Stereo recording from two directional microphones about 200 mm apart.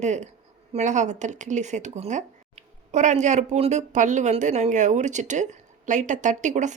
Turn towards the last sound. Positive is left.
turn(degrees=-35)  # may be behind; listen again after turning